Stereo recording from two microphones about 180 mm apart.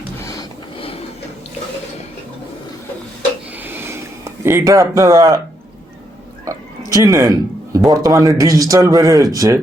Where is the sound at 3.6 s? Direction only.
10° right (ahead or behind).